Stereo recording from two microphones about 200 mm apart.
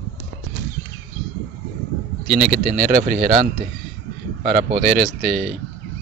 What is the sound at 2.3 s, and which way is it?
A man's voice, 50° right (ahead or behind).